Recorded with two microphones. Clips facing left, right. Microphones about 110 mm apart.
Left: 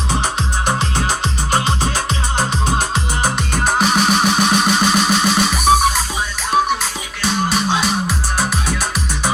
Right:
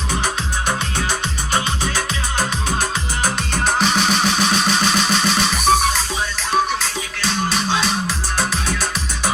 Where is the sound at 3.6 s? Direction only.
10° left (ahead or behind).